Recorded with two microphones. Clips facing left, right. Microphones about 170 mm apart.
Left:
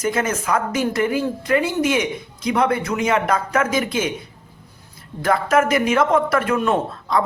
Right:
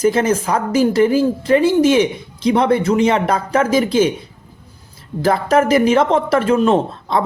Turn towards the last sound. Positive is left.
turn(degrees=-25)  # may be behind; listen again after turning